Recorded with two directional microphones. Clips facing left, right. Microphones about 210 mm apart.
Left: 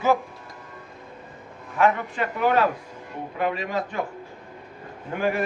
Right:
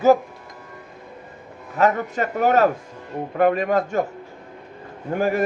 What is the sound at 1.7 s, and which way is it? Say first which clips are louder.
A man's voice: right 2 dB; 40° right (ahead or behind).